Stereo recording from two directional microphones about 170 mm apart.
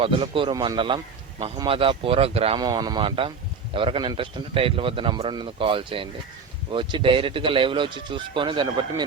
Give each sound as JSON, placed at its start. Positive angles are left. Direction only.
{"t": 0.0, "sound": "a man's voice", "side_deg": -30}
{"t": 2.6, "sound": "a man's voice", "side_deg": -25}